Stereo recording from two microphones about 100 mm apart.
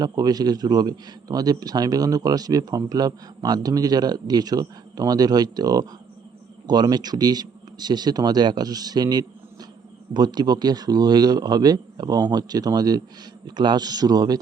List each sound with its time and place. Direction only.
0.0 s a man's voice: 40° right (ahead or behind)